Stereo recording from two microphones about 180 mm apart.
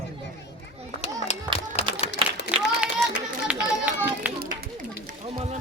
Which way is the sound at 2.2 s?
30° right (ahead or behind).